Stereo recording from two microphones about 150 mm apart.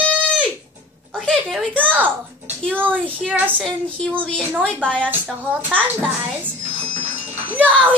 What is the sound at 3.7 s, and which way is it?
A woman's voice, 5° left (ahead or behind).